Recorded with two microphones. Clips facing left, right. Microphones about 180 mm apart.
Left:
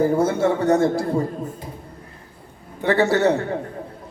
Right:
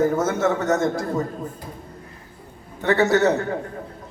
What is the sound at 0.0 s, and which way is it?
A man's voice, 30° left (ahead or behind).